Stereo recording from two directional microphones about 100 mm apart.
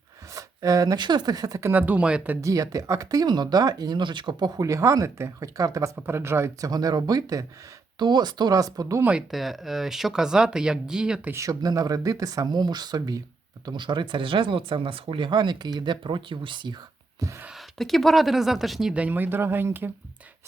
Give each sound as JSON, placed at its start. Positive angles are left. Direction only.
{"t": 0.3, "sound": "speech", "side_deg": -35}
{"t": 1.7, "sound": "speech", "side_deg": -15}
{"t": 2.4, "sound": "speech", "side_deg": -35}
{"t": 6.0, "sound": "speech", "side_deg": -25}
{"t": 6.7, "sound": "speech", "side_deg": -40}
{"t": 9.3, "sound": "speech", "side_deg": 0}
{"t": 11.3, "sound": "speech", "side_deg": -30}
{"t": 13.7, "sound": "speech", "side_deg": -50}
{"t": 17.5, "sound": "speech", "side_deg": 0}
{"t": 19.0, "sound": "speech", "side_deg": -20}